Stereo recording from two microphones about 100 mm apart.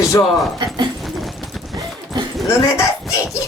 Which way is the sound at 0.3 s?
Centre (ahead or behind).